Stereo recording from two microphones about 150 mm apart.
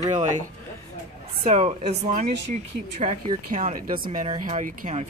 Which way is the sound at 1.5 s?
50° right (ahead or behind).